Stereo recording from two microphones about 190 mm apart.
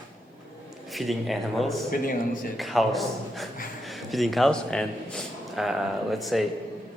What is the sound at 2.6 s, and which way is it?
A man's voice, centre (ahead or behind).